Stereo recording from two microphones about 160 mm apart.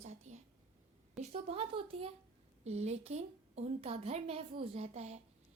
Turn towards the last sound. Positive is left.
turn(degrees=-45)  # may be behind; listen again after turning